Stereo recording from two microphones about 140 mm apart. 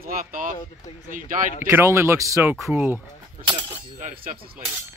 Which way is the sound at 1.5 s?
15° right (ahead or behind).